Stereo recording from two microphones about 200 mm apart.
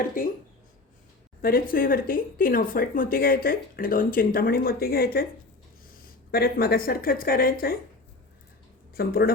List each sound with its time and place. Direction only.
1.4 s speech: 45° left (ahead or behind)
6.3 s speech: 50° left (ahead or behind)
9.0 s speech: 50° left (ahead or behind)